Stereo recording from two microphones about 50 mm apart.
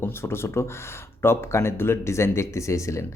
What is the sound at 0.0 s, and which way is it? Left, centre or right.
Speech, left.